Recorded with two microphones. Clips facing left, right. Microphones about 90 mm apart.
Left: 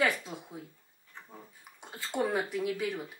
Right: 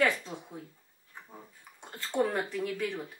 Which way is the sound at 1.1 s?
10° right (ahead or behind).